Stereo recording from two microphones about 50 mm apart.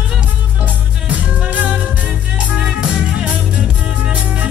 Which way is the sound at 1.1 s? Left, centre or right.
Right.